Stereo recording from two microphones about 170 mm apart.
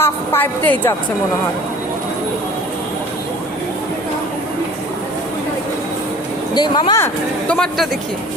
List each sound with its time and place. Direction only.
0.0 s a woman's voice: 10° left (ahead or behind)
6.5 s speech: 25° left (ahead or behind)
7.0 s speech: 5° left (ahead or behind)